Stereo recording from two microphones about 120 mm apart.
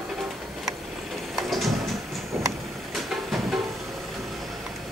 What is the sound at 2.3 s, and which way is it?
Vehicle, 15° right (ahead or behind).